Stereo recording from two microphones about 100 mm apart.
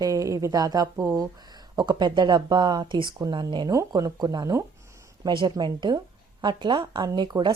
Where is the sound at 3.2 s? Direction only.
40° right (ahead or behind).